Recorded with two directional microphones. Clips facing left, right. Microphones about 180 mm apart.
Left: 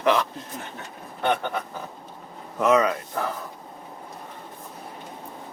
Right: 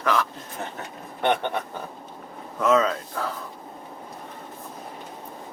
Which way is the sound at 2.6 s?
15° left (ahead or behind).